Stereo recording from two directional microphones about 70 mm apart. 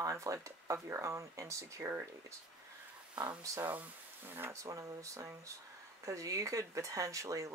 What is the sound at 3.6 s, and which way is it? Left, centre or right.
Speech, right.